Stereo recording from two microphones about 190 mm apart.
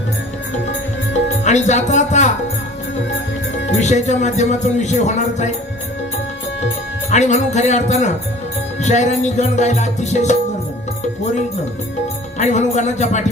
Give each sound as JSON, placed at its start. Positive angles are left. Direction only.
{"t": 1.5, "sound": "speech", "side_deg": 40}
{"t": 3.8, "sound": "speech", "side_deg": 35}
{"t": 7.1, "sound": "speech", "side_deg": 40}
{"t": 12.4, "sound": "speech", "side_deg": 35}